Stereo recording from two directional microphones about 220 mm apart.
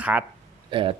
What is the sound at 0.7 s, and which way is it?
Speech, 25° right (ahead or behind).